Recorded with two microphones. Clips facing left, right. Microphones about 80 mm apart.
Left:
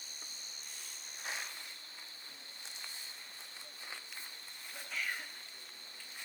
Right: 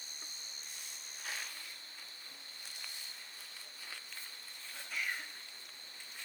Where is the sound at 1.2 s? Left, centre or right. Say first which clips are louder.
Left 2 dB; left.